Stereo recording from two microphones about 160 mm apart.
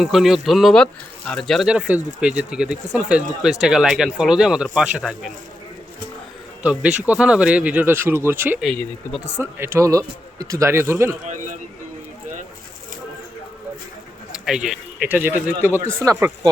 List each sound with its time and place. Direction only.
0.0 s speech: centre (ahead or behind)
6.6 s speech: 10° right (ahead or behind)
14.3 s speech: 5° right (ahead or behind); by 16.5 s 20° right (ahead or behind)